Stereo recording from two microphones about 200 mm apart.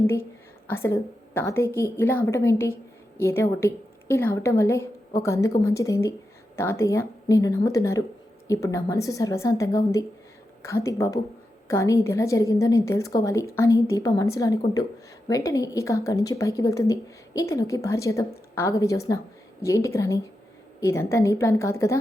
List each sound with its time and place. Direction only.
0.7 s a woman's voice: 10° left (ahead or behind)